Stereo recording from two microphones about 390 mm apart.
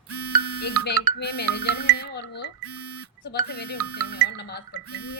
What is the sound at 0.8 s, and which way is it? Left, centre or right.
A woman's voice, left.